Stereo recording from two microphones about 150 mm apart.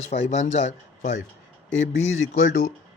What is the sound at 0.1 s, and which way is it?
Speech, 50° left (ahead or behind).